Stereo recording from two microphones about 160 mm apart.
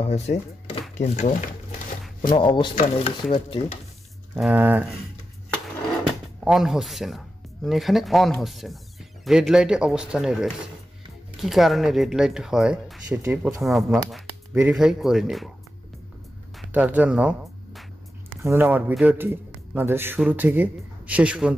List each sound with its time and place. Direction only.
0.0 s speech: 40° left (ahead or behind)
2.3 s speech: 30° left (ahead or behind)
2.7 s speech: 50° left (ahead or behind)
3.3 s speech: 35° left (ahead or behind)
4.4 s a man's voice: 10° right (ahead or behind)
6.4 s a man's voice: 5° right (ahead or behind)
13.6 s speech: centre (ahead or behind)
16.7 s a man's voice: 10° right (ahead or behind)